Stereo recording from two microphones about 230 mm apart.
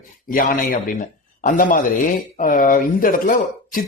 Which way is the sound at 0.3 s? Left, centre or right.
Left.